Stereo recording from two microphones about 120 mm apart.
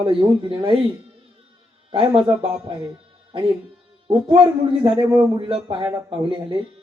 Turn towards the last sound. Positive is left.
turn(degrees=-40)  # may be behind; listen again after turning